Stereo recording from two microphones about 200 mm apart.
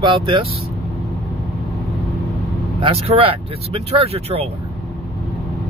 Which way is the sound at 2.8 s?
30° right (ahead or behind).